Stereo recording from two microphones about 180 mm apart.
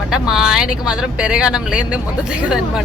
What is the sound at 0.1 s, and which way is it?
Speech, 5° right (ahead or behind).